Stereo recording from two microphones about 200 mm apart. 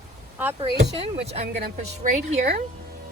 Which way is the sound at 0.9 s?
30° right (ahead or behind).